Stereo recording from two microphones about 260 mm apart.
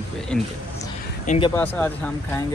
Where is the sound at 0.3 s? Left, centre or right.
Centre.